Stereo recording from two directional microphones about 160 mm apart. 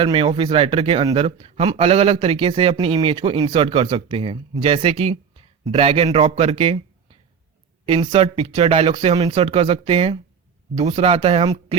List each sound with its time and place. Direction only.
0.0 s a man's voice: 35° right (ahead or behind)